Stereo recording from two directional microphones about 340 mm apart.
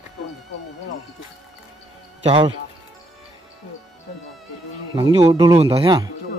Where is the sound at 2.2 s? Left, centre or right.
Centre.